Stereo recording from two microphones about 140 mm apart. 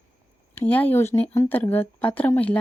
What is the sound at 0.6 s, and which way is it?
Speech, 10° left (ahead or behind).